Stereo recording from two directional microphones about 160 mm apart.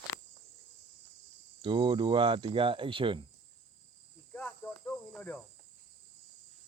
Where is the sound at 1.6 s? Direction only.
30° right (ahead or behind).